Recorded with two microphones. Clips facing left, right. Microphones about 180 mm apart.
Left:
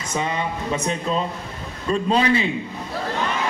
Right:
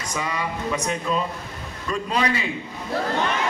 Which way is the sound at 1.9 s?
30° left (ahead or behind).